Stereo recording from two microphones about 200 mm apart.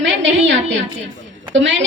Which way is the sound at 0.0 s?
65° right (ahead or behind).